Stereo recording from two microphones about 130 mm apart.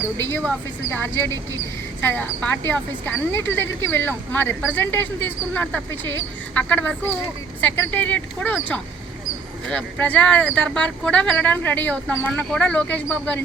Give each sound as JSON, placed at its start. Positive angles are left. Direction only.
{"t": 0.9, "sound": "speech", "side_deg": 15}